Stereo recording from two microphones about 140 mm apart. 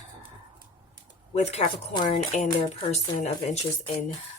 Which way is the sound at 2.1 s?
65° left (ahead or behind).